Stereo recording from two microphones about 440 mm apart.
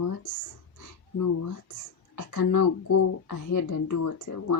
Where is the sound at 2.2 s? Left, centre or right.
Left.